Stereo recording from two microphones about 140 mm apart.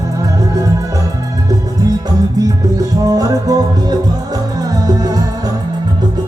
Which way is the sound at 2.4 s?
25° right (ahead or behind).